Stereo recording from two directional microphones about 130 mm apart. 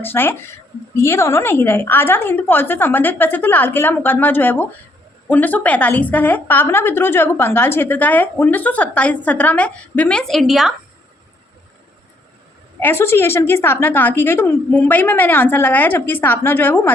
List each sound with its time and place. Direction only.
0.0 s a woman's voice: 15° left (ahead or behind); by 10.8 s centre (ahead or behind)
12.8 s a woman's voice: 15° left (ahead or behind)